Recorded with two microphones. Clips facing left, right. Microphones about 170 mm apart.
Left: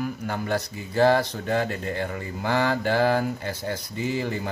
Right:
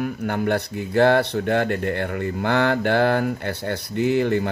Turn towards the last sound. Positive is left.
turn(degrees=-65)  # may be behind; listen again after turning